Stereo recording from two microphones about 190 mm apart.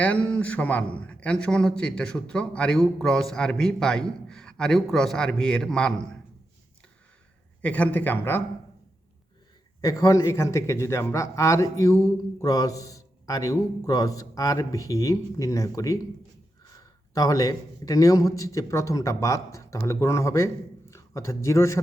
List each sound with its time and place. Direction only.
0.0 s a man's voice: 5° left (ahead or behind)
7.6 s a man's voice: 10° left (ahead or behind)
9.8 s a man's voice: 15° left (ahead or behind)